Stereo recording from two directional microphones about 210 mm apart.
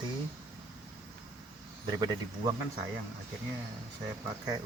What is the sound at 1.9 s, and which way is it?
Speech, 20° right (ahead or behind).